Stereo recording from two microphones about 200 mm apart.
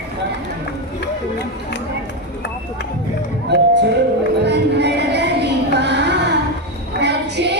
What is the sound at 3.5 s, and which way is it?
Music, 60° right (ahead or behind).